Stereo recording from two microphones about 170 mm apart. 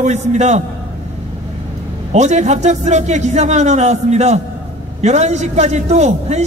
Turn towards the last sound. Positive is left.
turn(degrees=-40)  # may be behind; listen again after turning